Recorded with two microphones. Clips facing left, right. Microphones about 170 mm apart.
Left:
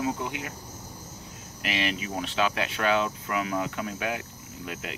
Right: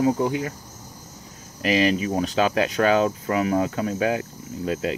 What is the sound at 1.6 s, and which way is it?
Speech, 40° right (ahead or behind).